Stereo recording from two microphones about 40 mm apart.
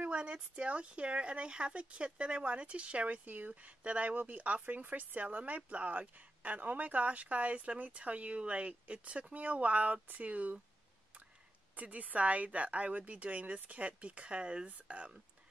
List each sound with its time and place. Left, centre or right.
0.2 s speech: right
11.7 s speech: right